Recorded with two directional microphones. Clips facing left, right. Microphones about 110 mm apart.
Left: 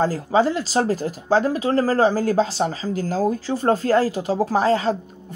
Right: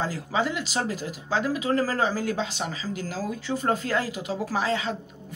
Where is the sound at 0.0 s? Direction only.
40° left (ahead or behind).